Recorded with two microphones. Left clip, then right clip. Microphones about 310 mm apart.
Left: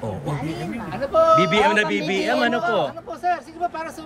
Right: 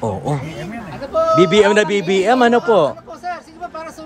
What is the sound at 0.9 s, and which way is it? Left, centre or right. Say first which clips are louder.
Speech: even; left.